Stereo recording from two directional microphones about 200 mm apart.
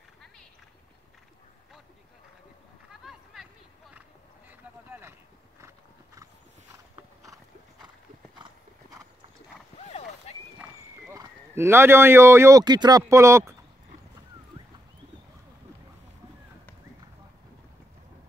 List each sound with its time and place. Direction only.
2.9 s a sound: centre (ahead or behind)
4.5 s boat: 10° right (ahead or behind)
9.8 s boat: 30° left (ahead or behind)
10.6 s clip-clop: 10° right (ahead or behind)
13.0 s speech: 15° right (ahead or behind)